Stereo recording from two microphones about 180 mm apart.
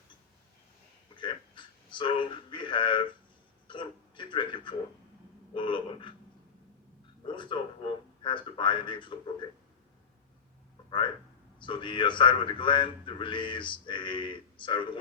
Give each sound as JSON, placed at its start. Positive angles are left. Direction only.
{"t": 1.1, "sound": "a sound", "side_deg": 25}
{"t": 3.7, "sound": "a man's voice", "side_deg": 25}
{"t": 7.3, "sound": "a man's voice", "side_deg": 25}
{"t": 10.8, "sound": "speech", "side_deg": 25}